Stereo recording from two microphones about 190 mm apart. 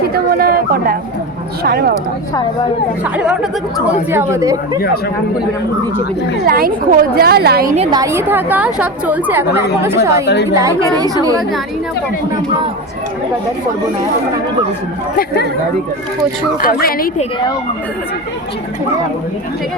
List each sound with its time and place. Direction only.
0.1 s a woman's voice: 50° right (ahead or behind)
3.8 s a woman's voice: 10° right (ahead or behind)
6.4 s a woman's voice: 50° right (ahead or behind)
7.8 s a woman's voice: 20° right (ahead or behind)
16.6 s speech: 50° left (ahead or behind)